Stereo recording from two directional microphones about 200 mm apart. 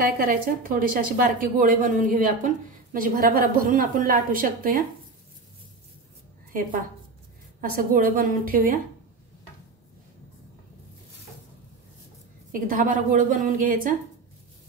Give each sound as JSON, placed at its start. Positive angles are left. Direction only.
{"t": 0.2, "sound": "a woman's voice", "side_deg": -45}
{"t": 7.6, "sound": "a woman's voice", "side_deg": -45}
{"t": 12.5, "sound": "a woman's voice", "side_deg": -45}